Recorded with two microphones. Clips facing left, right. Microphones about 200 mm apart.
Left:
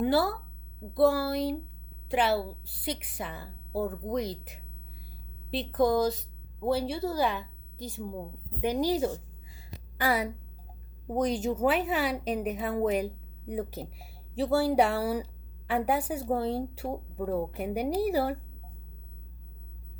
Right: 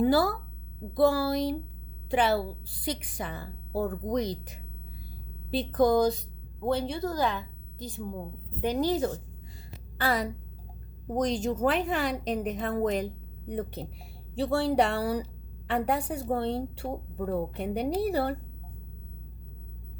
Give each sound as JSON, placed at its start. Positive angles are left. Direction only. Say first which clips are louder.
{"t": 0.0, "sound": "a woman's voice", "louder": "right 2 dB", "side_deg": 0}
{"t": 7.8, "sound": "a woman's voice", "louder": "even", "side_deg": -15}
{"t": 8.6, "sound": "a woman's voice", "louder": "even", "side_deg": 10}